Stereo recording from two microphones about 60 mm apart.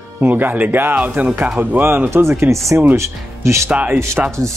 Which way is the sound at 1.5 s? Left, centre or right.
Right.